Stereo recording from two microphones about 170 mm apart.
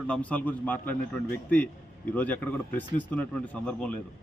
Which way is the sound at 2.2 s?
10° left (ahead or behind).